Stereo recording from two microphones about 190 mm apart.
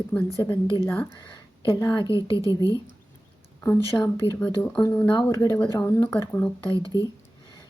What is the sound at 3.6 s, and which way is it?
Speech, 10° left (ahead or behind).